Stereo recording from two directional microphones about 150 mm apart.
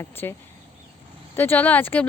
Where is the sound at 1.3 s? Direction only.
15° left (ahead or behind).